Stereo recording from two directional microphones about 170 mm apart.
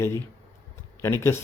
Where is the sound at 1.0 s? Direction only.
15° left (ahead or behind).